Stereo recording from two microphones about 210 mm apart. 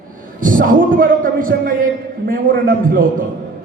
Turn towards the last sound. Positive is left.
turn(degrees=-45)  # may be behind; listen again after turning